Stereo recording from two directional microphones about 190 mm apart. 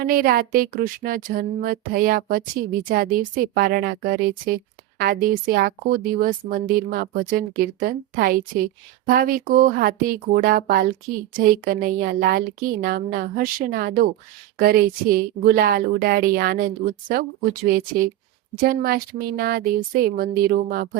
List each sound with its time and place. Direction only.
0.0 s speech: 50° right (ahead or behind)